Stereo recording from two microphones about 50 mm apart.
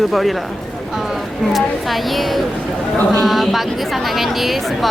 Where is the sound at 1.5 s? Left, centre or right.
Centre.